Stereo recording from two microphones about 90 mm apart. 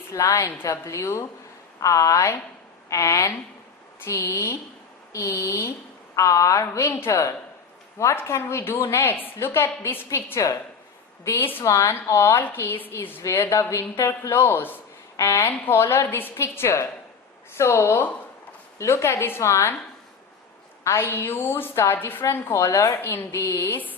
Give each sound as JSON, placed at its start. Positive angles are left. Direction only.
{"t": 0.1, "sound": "a woman's voice", "side_deg": 35}
{"t": 11.6, "sound": "a woman's voice", "side_deg": 35}
{"t": 20.8, "sound": "a woman's voice", "side_deg": 30}